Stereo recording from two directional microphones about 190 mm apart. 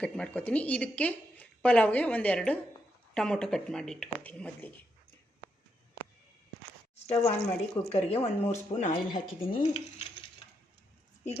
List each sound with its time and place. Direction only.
0.0 s a woman's voice: 5° left (ahead or behind)
6.9 s a sound: 35° left (ahead or behind)
7.8 s speech: 20° left (ahead or behind)
8.1 s speech: 30° left (ahead or behind)